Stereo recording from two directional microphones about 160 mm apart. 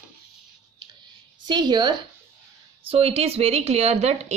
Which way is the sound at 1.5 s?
25° right (ahead or behind).